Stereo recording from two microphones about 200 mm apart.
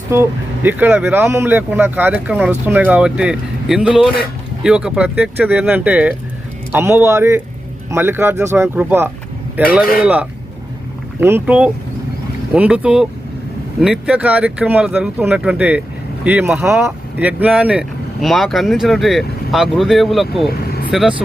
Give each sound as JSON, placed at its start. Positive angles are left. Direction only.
{"t": 0.1, "sound": "speech", "side_deg": -10}
{"t": 20.7, "sound": "vehicle", "side_deg": 50}
{"t": 20.9, "sound": "speech", "side_deg": 0}